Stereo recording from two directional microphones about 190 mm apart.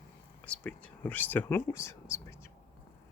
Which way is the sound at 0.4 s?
5° left (ahead or behind).